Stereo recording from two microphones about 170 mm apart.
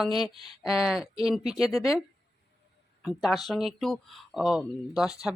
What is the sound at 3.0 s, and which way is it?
Speech, centre (ahead or behind).